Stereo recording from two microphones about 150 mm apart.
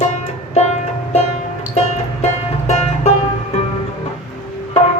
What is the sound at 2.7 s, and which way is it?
Music, 45° left (ahead or behind).